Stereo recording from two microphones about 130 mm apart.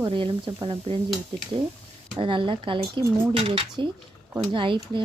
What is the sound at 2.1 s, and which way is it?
Speech, 40° right (ahead or behind).